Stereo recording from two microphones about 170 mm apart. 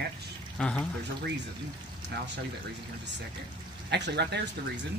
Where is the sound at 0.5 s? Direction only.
5° left (ahead or behind).